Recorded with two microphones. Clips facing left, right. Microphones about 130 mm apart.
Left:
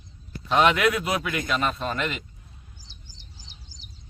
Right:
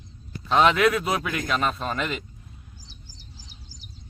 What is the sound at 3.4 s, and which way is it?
Bird, 25° left (ahead or behind).